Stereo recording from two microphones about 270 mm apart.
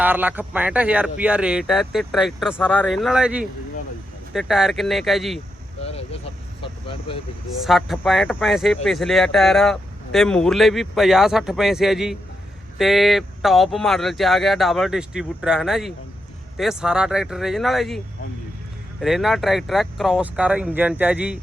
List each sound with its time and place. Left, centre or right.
0.0 s speech: centre
5.8 s a sound: left
6.6 s vehicle: centre
7.6 s speech: centre